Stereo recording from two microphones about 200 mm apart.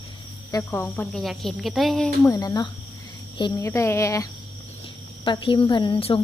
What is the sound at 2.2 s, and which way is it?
A woman's voice, 15° left (ahead or behind).